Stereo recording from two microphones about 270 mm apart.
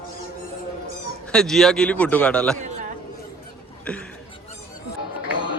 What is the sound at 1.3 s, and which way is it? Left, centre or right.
A man's voice, centre.